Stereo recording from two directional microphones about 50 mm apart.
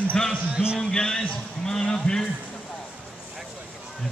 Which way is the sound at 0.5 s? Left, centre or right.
Centre.